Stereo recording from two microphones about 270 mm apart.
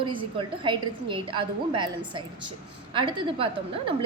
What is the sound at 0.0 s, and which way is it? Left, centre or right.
A woman's voice, centre.